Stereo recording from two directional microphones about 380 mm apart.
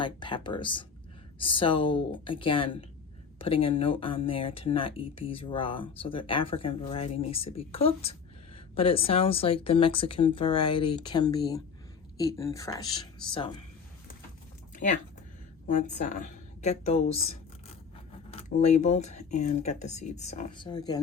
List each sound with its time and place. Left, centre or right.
0.0 s speech: centre
15.6 s a woman's voice: centre